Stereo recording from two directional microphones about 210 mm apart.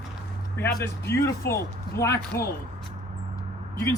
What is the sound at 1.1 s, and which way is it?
Speech, 15° left (ahead or behind).